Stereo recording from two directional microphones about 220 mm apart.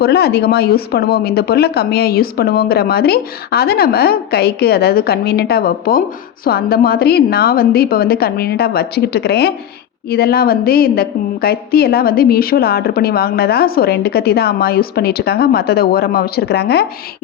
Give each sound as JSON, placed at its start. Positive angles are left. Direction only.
{"t": 0.0, "sound": "a woman's voice", "side_deg": 45}